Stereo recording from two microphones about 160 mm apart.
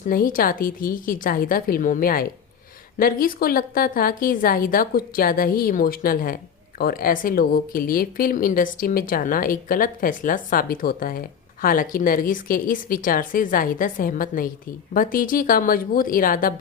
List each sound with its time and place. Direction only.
0.1 s a woman's voice: 60° left (ahead or behind)